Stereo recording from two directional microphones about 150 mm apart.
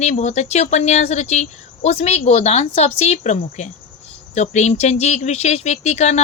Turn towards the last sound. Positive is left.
turn(degrees=45)  # may be behind; listen again after turning